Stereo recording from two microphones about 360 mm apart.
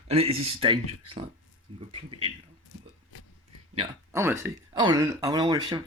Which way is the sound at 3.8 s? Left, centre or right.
Centre.